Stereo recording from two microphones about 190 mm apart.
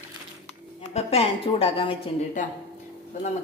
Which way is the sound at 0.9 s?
30° left (ahead or behind).